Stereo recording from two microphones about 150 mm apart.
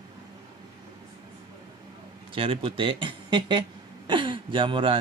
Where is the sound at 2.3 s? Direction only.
40° right (ahead or behind).